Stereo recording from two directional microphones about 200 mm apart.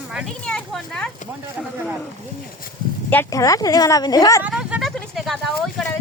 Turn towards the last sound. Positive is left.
turn(degrees=0)  # may be behind; listen again after turning